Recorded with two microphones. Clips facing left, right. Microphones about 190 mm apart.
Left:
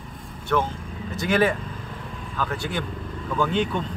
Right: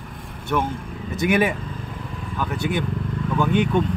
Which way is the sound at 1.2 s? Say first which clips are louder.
Right 1 dB; 15° right (ahead or behind).